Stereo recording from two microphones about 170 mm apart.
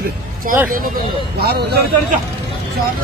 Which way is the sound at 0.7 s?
60° right (ahead or behind).